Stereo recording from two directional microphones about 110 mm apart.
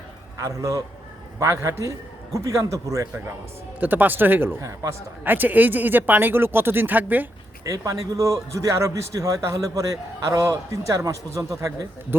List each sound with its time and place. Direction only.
0.4 s a man's voice: 30° right (ahead or behind)
3.8 s speech: 15° right (ahead or behind)
7.6 s a man's voice: 30° right (ahead or behind)